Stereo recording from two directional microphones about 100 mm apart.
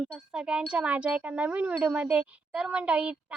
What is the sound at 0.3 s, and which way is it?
Speech, 10° right (ahead or behind).